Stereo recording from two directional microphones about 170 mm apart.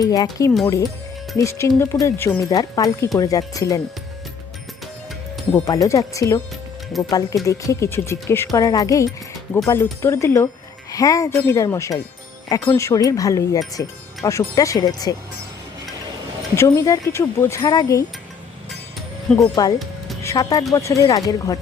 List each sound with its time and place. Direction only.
0.0 s speech: 20° left (ahead or behind)
5.6 s speech: 20° left (ahead or behind)
16.6 s speech: 20° left (ahead or behind)
19.4 s speech: 20° left (ahead or behind)